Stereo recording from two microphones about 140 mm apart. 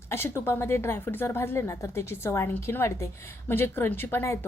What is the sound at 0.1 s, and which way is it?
A woman's voice, 15° left (ahead or behind).